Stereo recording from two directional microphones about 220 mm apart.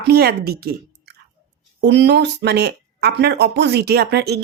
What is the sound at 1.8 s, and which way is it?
Speech, 50° right (ahead or behind).